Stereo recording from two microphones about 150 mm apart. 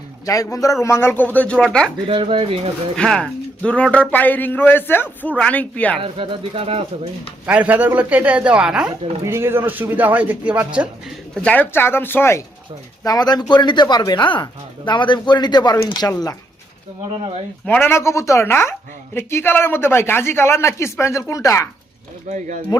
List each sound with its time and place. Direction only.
0.3 s a woman's voice: 20° left (ahead or behind); by 1.9 s 5° left (ahead or behind)
2.0 s speech: 35° right (ahead or behind)
2.9 s a woman's voice: 5° left (ahead or behind)
6.0 s speech: 35° right (ahead or behind)
7.4 s speech: 10° right (ahead or behind)
9.2 s speech: 15° right (ahead or behind)
11.3 s a woman's voice: 10° left (ahead or behind)
13.1 s speech: 25° left (ahead or behind)
17.7 s a woman's voice: 15° left (ahead or behind)
22.3 s speech: 55° right (ahead or behind)